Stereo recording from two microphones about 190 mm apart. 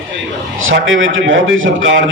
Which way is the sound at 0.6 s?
80° right.